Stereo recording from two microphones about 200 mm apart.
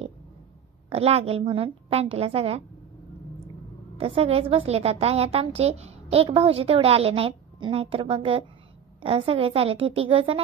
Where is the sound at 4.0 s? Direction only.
30° right (ahead or behind).